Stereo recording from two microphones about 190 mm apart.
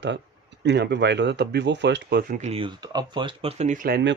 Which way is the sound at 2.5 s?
25° right (ahead or behind).